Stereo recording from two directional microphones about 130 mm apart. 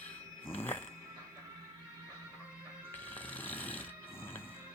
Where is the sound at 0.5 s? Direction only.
15° left (ahead or behind).